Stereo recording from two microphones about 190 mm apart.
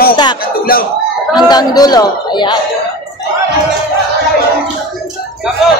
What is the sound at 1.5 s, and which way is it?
Speech, 20° left (ahead or behind).